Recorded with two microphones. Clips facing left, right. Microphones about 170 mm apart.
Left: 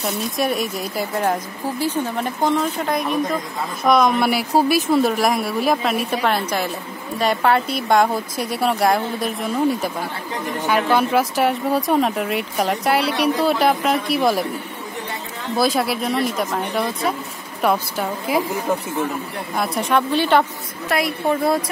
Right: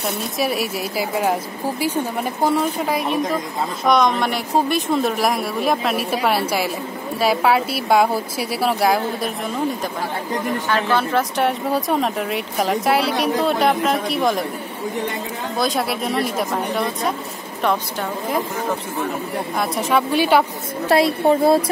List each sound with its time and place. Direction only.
0.0 s speech: 5° right (ahead or behind)
10.7 s speech: 10° left (ahead or behind)
15.5 s speech: centre (ahead or behind)
19.5 s speech: centre (ahead or behind)
20.9 s a woman's voice: 30° right (ahead or behind)